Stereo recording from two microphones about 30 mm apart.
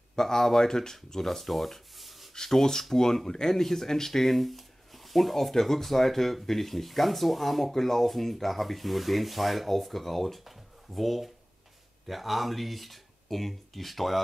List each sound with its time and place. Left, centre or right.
0.1 s speech: centre
1.2 s speech: centre
2.8 s speech: centre
10.4 s a sound: centre
12.1 s speech: centre